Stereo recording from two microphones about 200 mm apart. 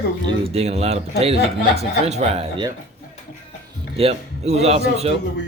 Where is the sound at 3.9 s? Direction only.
30° right (ahead or behind).